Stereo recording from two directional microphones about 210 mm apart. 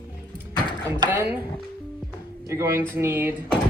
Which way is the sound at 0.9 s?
15° right (ahead or behind).